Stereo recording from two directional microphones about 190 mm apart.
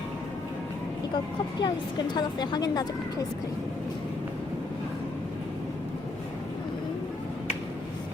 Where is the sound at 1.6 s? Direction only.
25° left (ahead or behind).